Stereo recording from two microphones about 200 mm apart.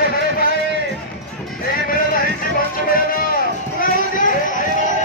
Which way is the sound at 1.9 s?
45° left (ahead or behind).